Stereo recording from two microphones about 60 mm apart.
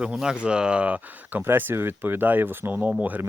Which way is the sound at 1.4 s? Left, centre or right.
Right.